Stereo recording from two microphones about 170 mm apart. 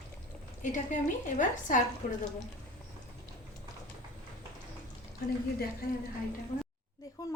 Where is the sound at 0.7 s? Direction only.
45° left (ahead or behind).